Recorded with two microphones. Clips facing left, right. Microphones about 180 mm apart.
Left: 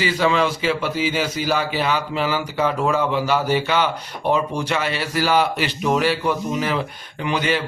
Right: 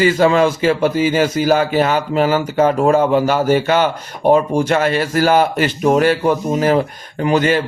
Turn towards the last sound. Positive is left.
turn(degrees=-45)  # may be behind; listen again after turning